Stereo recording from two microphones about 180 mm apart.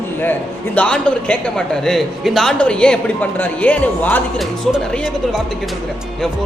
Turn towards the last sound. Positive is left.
turn(degrees=0)  # may be behind; listen again after turning